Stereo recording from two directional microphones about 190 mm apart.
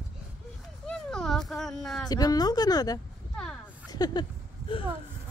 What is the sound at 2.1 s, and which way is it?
Speech, 20° left (ahead or behind).